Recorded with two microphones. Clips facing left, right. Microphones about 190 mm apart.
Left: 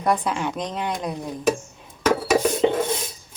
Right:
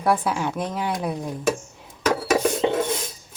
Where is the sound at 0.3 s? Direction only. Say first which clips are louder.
Right 1 dB; 5° right (ahead or behind).